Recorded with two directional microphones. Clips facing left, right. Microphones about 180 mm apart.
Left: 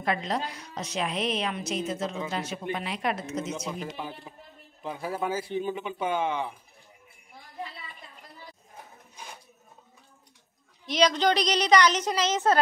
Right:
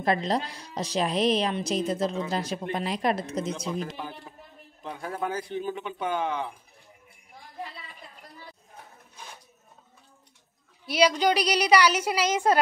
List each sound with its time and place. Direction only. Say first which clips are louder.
0.0 s a woman's voice: right 3 dB; 35° right (ahead or behind)
3.8 s a man's voice: even; 5° left (ahead or behind)
10.9 s a woman's voice: right 1 dB; 10° right (ahead or behind)